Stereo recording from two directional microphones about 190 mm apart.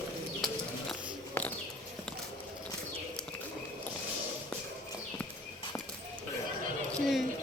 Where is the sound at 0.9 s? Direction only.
10° left (ahead or behind).